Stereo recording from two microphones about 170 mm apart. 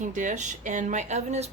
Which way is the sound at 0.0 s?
45° right (ahead or behind).